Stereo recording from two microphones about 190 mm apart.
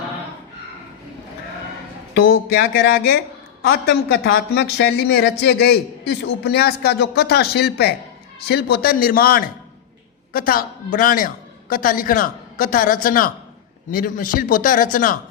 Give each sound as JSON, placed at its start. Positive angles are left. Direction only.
{"t": 2.1, "sound": "a man's voice", "side_deg": 65}